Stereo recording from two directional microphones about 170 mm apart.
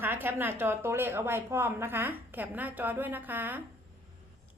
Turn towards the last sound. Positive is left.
turn(degrees=-10)  # may be behind; listen again after turning